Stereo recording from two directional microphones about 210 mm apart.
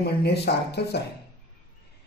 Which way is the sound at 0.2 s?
50° left (ahead or behind).